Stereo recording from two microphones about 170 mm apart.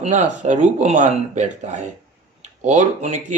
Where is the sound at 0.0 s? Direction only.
40° right (ahead or behind).